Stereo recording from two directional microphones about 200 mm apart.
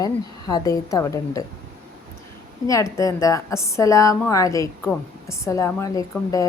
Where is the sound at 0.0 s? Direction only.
20° left (ahead or behind).